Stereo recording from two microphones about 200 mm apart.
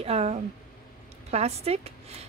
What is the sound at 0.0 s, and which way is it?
A woman's voice, 30° right (ahead or behind).